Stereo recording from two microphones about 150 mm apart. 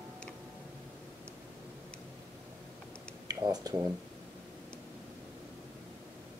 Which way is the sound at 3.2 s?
25° right (ahead or behind).